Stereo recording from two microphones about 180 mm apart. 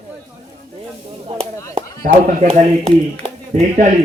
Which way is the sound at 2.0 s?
45° right (ahead or behind).